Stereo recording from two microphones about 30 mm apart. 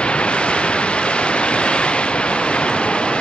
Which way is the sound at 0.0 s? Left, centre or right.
Left.